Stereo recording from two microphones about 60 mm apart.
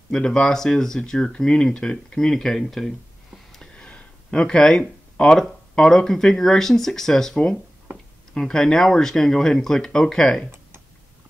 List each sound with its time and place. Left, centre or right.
0.1 s speech: centre
3.7 s speech: centre